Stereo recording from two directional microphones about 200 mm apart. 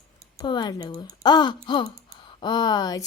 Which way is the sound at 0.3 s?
20° left (ahead or behind).